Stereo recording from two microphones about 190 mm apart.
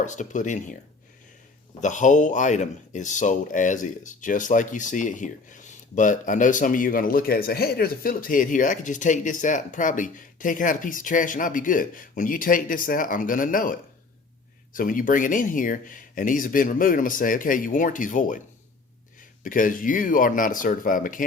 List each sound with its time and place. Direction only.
0.0 s speech: 40° left (ahead or behind)
1.8 s speech: 40° left (ahead or behind)
19.5 s speech: 45° left (ahead or behind)